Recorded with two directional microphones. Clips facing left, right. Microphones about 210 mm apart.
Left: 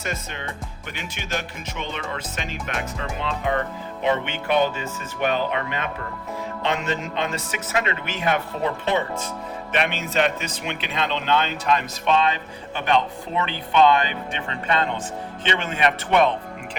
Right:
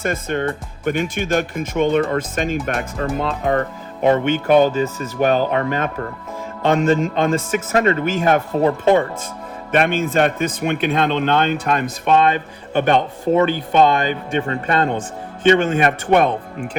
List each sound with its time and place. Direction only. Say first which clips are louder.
0.0 s a man's voice: right 10 dB; 50° right (ahead or behind)